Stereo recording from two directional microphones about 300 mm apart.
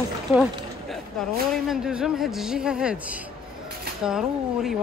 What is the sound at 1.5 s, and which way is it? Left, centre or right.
Speech, centre.